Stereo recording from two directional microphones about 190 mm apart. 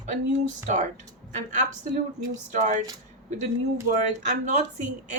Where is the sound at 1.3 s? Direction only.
40° right (ahead or behind).